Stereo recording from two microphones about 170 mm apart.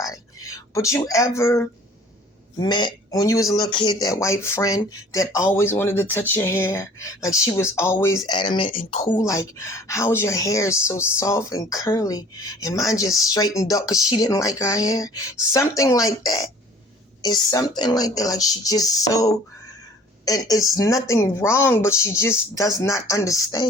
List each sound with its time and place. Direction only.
0.0 s a sound: 20° left (ahead or behind)
2.6 s speech: 25° left (ahead or behind)
8.3 s a woman's voice: 30° left (ahead or behind)
9.1 s a woman's voice: 20° left (ahead or behind)